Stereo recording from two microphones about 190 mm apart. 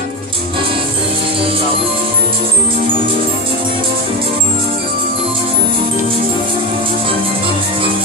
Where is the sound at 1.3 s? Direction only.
30° right (ahead or behind).